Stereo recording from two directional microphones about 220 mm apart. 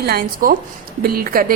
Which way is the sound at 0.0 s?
40° right (ahead or behind).